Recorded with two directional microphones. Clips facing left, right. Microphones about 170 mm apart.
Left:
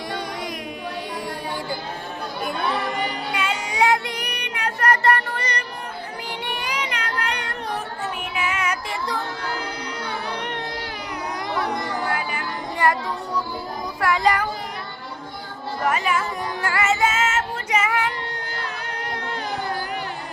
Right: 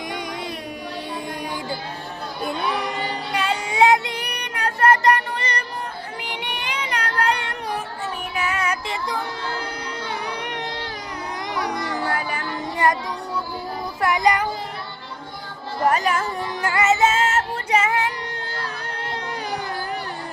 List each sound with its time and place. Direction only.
3.1 s child singing: 35° right (ahead or behind)
5.0 s music: 20° right (ahead or behind)
6.4 s child singing: 20° right (ahead or behind)
8.4 s music: 35° right (ahead or behind)
12.0 s music: 35° right (ahead or behind)
12.7 s child singing: 20° right (ahead or behind)
14.0 s child singing: 20° right (ahead or behind)
15.9 s speech: 40° right (ahead or behind)
16.6 s music: 20° right (ahead or behind)